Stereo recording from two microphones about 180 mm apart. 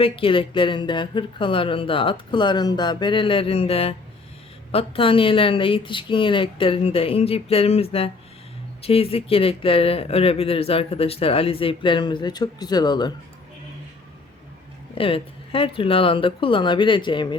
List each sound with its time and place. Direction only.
0.0 s speech: 30° left (ahead or behind)
14.9 s speech: 30° left (ahead or behind)